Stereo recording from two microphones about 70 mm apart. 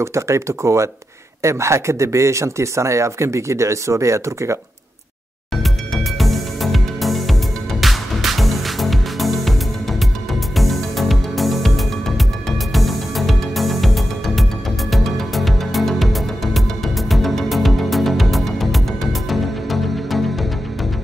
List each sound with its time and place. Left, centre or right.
0.0 s speech: right
6.1 s music: centre
10.5 s music: centre